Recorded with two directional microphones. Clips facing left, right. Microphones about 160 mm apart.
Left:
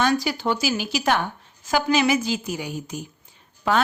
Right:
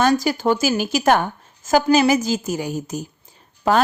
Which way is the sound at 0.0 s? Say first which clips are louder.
Right 4 dB; 45° right (ahead or behind).